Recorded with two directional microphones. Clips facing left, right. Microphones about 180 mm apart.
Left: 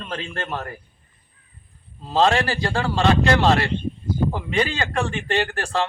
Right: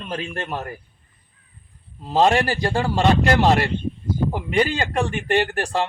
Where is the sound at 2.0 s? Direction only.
15° right (ahead or behind).